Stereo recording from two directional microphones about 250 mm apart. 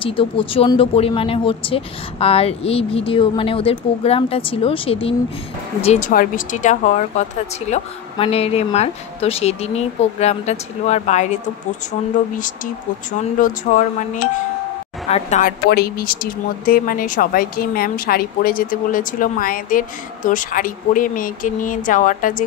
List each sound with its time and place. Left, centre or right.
0.0 s speech: left
13.4 s speech: left
15.7 s speech: left